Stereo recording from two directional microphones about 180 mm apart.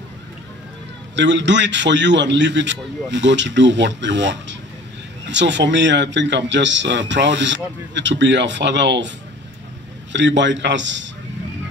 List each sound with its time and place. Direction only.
1.1 s a man's voice: 85° right
10.1 s a man's voice: 85° right